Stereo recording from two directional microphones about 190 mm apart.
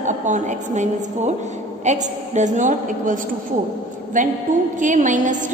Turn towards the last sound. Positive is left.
turn(degrees=-40)  # may be behind; listen again after turning